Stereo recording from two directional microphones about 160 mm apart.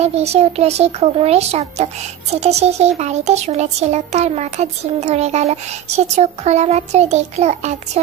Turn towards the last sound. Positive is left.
turn(degrees=-45)  # may be behind; listen again after turning